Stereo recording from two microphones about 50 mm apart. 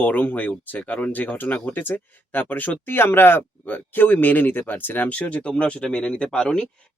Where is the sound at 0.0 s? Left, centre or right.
Left.